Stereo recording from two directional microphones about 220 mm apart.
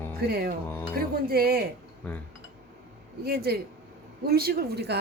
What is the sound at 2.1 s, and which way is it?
Speech, 5° left (ahead or behind).